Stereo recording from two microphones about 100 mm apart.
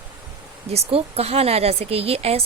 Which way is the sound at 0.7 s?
80° right.